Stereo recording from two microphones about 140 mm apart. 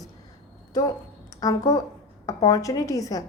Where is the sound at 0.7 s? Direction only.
25° left (ahead or behind).